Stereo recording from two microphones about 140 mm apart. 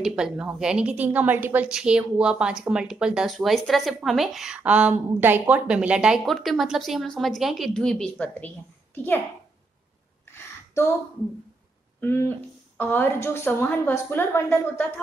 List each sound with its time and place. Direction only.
0.0 s a woman's voice: 5° right (ahead or behind); by 9.2 s 15° left (ahead or behind)
10.7 s speech: 20° left (ahead or behind)
12.0 s a woman's voice: 15° left (ahead or behind)